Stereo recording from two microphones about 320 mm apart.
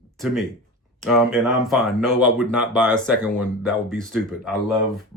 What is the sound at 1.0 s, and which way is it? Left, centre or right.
Speech, centre.